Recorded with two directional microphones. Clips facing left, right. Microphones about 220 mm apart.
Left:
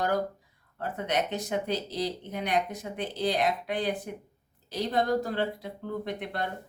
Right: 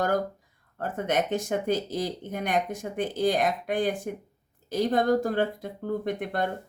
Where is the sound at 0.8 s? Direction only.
50° right (ahead or behind).